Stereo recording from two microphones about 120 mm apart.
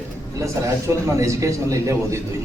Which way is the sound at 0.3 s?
25° right (ahead or behind).